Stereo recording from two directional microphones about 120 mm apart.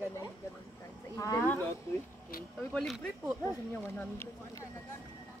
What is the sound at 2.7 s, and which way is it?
A woman's voice, 10° left (ahead or behind).